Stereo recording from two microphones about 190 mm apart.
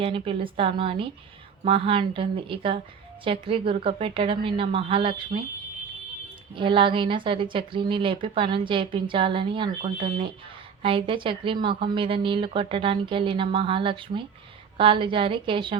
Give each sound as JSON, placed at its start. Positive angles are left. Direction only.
{"t": 0.0, "sound": "a woman's voice", "side_deg": -30}
{"t": 6.5, "sound": "a woman's voice", "side_deg": -25}